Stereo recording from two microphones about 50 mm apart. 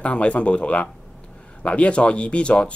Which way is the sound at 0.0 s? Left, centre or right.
Left.